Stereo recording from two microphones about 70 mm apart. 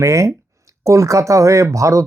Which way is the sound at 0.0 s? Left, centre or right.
Right.